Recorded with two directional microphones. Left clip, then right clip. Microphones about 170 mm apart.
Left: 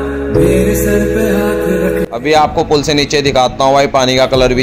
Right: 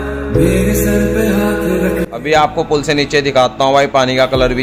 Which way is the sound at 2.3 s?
25° left (ahead or behind).